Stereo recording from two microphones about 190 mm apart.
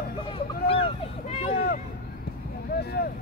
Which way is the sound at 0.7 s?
30° left (ahead or behind).